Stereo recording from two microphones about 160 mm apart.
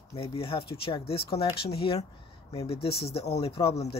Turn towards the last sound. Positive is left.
turn(degrees=40)  # may be behind; listen again after turning